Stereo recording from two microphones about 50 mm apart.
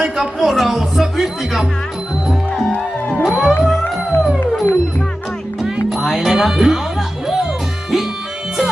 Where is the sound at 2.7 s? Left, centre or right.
Left.